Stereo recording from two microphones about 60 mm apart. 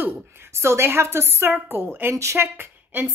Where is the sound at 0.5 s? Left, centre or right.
Right.